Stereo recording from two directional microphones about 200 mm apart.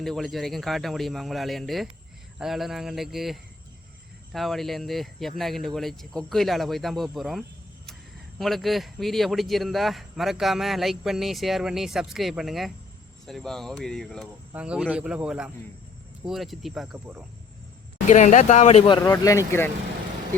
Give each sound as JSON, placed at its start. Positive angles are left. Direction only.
{"t": 0.0, "sound": "a man's voice", "side_deg": 0}
{"t": 18.1, "sound": "speech", "side_deg": 35}
{"t": 19.0, "sound": "speech", "side_deg": 15}